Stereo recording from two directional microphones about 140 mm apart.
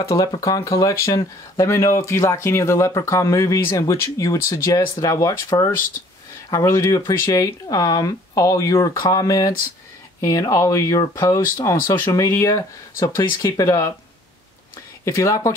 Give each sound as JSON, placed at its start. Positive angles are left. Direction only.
{"t": 0.1, "sound": "speech", "side_deg": 25}
{"t": 15.0, "sound": "speech", "side_deg": 25}